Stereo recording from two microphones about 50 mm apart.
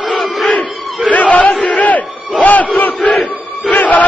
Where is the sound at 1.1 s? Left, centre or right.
Left.